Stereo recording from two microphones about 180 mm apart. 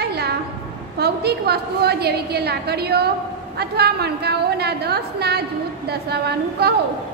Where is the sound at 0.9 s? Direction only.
65° right (ahead or behind).